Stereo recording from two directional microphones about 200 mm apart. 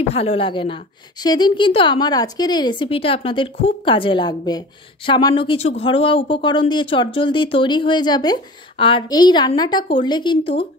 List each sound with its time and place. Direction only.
0.1 s speech: 30° left (ahead or behind)